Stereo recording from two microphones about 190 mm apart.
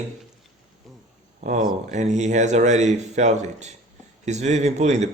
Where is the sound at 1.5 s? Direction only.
40° right (ahead or behind).